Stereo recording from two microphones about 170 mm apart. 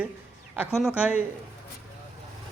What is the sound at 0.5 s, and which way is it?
Speech, 10° right (ahead or behind).